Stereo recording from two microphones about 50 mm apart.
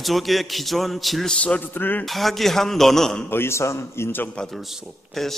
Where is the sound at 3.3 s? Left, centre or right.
Left.